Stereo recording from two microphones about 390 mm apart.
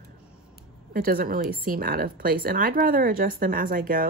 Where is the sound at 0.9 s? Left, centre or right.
Right.